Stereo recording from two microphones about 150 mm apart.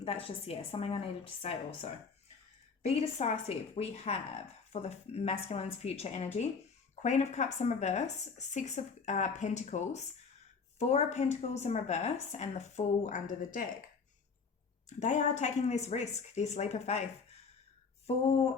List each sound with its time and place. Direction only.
0.0 s a woman's voice: 40° left (ahead or behind); by 13.7 s 60° left (ahead or behind)
14.8 s a woman's voice: 55° left (ahead or behind)
18.0 s a woman's voice: 45° left (ahead or behind)